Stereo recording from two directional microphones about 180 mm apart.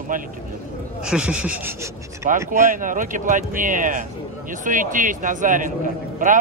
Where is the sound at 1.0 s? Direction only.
5° right (ahead or behind).